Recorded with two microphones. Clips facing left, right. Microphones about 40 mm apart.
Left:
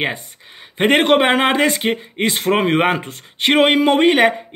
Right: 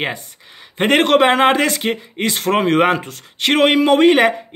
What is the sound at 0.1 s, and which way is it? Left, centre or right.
Speech, left.